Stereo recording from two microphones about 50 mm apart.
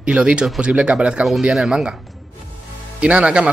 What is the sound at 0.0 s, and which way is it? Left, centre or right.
Speech, right.